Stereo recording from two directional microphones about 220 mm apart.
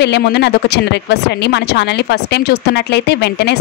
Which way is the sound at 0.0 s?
50° left (ahead or behind).